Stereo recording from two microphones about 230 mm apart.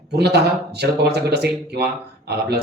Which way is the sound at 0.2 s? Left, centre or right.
Right.